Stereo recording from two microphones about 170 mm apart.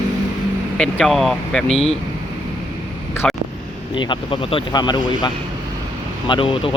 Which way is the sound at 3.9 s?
30° left (ahead or behind).